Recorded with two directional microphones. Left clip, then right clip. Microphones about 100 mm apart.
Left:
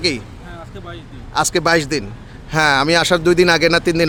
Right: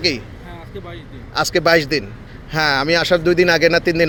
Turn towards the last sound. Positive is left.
turn(degrees=55)  # may be behind; listen again after turning